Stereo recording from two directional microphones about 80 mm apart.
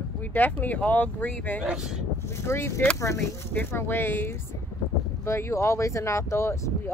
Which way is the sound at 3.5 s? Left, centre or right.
Left.